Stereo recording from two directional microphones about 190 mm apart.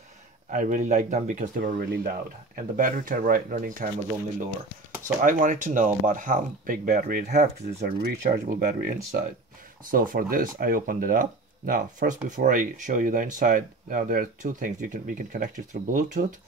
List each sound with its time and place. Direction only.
0.5 s speech: 40° right (ahead or behind)
1.8 s speech: 55° right (ahead or behind)
5.0 s speech: 45° right (ahead or behind)